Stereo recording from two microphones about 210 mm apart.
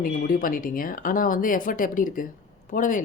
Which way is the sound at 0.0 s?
45° left (ahead or behind).